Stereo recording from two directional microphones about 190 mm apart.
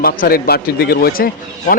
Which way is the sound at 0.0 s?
50° left (ahead or behind).